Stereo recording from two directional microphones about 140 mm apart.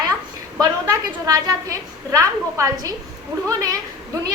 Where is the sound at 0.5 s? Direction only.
25° right (ahead or behind).